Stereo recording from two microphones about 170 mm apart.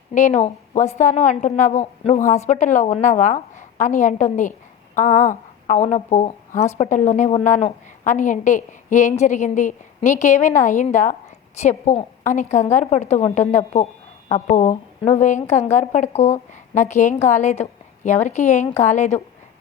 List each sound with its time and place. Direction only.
0.1 s speech: 45° left (ahead or behind)